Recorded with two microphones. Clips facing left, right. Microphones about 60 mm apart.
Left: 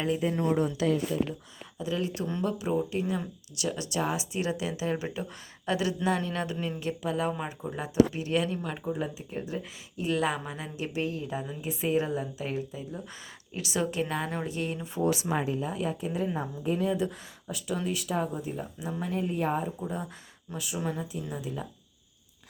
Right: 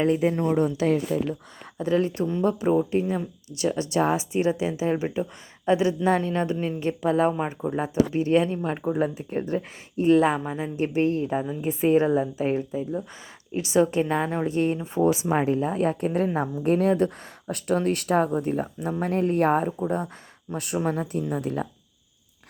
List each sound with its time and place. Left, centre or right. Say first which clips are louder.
0.3 s speech: right 4 dB; right
0.8 s a woman's voice: right 4 dB; right
1.8 s speech: right 8 dB; right
8.8 s speech: right 8 dB; right
10.8 s speech: right 9 dB; right
14.4 s speech: right 9 dB; right
15.4 s a woman's voice: right 7 dB; right
19.6 s a woman's voice: right 8 dB; right